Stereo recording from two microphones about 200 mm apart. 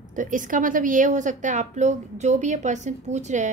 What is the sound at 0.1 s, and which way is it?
A woman's voice, 40° right (ahead or behind).